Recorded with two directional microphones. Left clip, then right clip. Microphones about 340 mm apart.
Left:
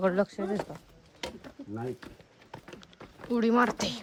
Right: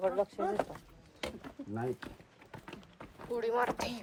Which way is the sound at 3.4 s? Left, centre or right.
Left.